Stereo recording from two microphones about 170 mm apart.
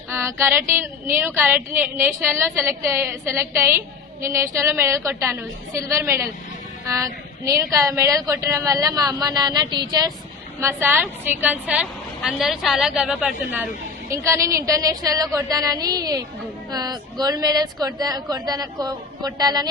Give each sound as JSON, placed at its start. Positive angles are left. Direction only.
{"t": 0.1, "sound": "a woman's voice", "side_deg": -15}
{"t": 10.6, "sound": "a woman's voice", "side_deg": -15}